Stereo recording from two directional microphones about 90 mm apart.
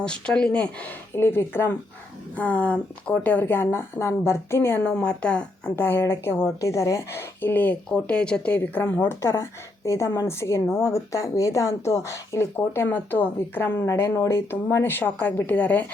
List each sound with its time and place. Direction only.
0.0 s speech: 10° left (ahead or behind)
1.1 s a woman's voice: 25° left (ahead or behind)
4.8 s speech: 10° left (ahead or behind)
5.7 s a woman's voice: 25° left (ahead or behind)
9.0 s a woman's voice: 30° left (ahead or behind)